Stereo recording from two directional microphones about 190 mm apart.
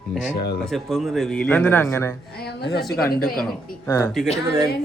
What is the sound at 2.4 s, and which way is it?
Speech, 60° left (ahead or behind).